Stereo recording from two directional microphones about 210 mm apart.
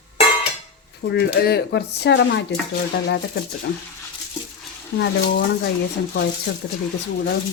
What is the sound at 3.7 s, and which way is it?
Speech, 55° left (ahead or behind).